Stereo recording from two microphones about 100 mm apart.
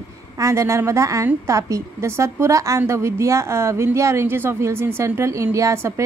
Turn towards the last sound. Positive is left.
turn(degrees=-30)  # may be behind; listen again after turning